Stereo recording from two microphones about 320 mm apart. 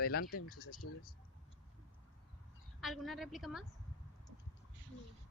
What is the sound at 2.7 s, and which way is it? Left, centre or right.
Speech, centre.